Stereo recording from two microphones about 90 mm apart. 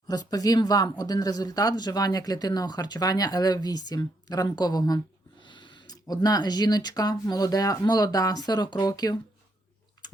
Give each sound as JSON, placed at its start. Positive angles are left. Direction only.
{"t": 0.1, "sound": "speech", "side_deg": 45}
{"t": 5.4, "sound": "speech", "side_deg": 60}